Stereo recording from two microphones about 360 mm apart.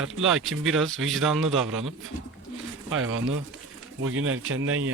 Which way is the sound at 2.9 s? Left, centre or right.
Right.